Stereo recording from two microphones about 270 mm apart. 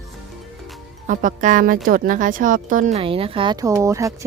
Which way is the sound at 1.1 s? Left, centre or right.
Right.